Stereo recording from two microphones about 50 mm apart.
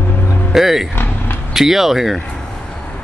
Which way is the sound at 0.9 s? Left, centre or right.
Left.